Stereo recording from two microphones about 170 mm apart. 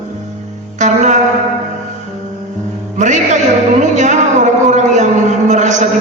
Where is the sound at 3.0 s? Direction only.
45° right (ahead or behind).